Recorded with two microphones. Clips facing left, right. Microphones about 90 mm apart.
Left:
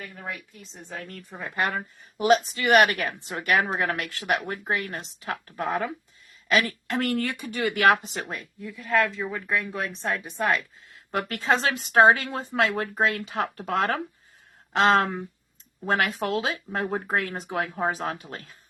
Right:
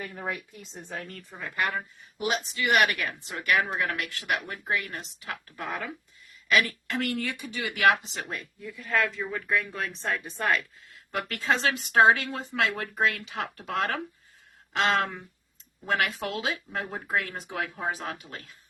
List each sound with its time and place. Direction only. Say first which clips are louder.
0.9 s a woman's voice: left 1 dB; centre (ahead or behind)
1.3 s speech: left 2 dB; 20° left (ahead or behind)
1.7 s speech: left 2 dB; 45° left (ahead or behind)
7.2 s speech: left 5 dB; 55° left (ahead or behind)
7.9 s speech: left 1 dB; 45° left (ahead or behind)
8.6 s a woman's voice: left 4 dB; centre (ahead or behind)
11.1 s speech: left 3 dB; 30° left (ahead or behind)